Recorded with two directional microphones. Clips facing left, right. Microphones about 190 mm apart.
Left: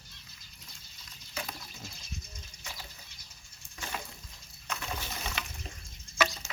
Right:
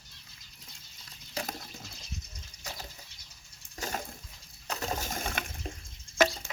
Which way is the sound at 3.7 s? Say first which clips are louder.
Right 4 dB; 40° right (ahead or behind).